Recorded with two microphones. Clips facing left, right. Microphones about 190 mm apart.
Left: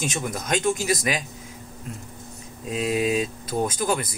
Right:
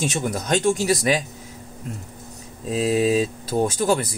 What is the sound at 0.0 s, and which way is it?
Speech, 35° right (ahead or behind).